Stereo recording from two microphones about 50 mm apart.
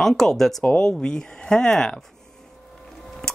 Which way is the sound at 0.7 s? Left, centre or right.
Centre.